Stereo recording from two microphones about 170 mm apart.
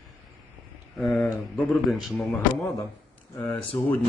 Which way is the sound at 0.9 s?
5° left (ahead or behind).